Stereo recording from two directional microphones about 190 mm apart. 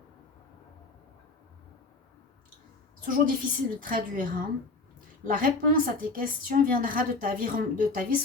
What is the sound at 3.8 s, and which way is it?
A woman's voice, 50° right (ahead or behind).